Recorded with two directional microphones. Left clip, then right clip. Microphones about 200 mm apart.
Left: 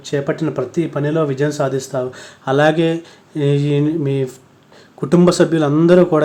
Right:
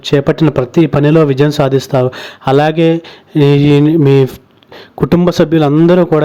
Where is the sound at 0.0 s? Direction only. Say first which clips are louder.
Right 9 dB; 45° right (ahead or behind).